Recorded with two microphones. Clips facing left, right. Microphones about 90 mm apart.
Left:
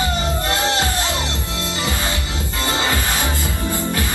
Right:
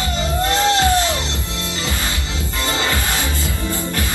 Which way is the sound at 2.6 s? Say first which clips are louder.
Even; 20° left (ahead or behind).